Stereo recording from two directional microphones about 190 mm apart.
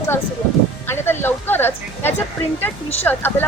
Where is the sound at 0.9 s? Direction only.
10° left (ahead or behind).